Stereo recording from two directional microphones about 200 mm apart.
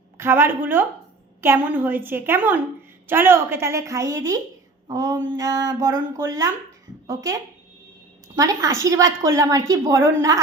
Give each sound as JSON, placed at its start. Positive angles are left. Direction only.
{"t": 0.2, "sound": "a woman's voice", "side_deg": -10}
{"t": 8.4, "sound": "a woman's voice", "side_deg": -15}